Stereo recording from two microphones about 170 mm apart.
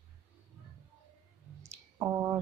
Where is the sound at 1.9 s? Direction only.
15° right (ahead or behind).